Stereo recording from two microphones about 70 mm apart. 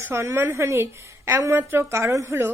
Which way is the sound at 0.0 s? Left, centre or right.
Right.